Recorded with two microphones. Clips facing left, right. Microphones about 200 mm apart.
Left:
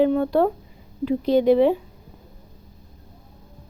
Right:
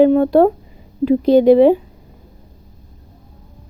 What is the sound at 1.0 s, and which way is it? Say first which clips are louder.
Speech: right 7 dB; 90° right.